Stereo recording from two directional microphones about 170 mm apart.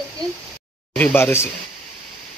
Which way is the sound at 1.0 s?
10° left (ahead or behind).